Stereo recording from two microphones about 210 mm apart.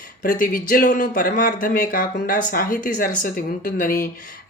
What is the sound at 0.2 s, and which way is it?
Speech, 40° left (ahead or behind).